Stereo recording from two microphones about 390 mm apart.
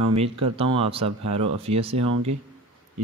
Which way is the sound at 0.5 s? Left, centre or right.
Centre.